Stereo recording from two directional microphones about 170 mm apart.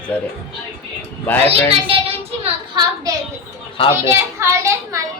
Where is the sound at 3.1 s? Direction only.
20° right (ahead or behind).